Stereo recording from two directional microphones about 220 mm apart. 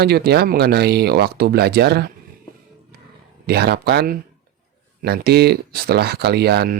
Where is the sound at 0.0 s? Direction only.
45° right (ahead or behind).